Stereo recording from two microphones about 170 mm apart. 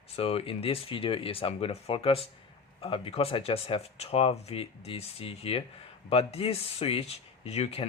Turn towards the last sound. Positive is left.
turn(degrees=35)  # may be behind; listen again after turning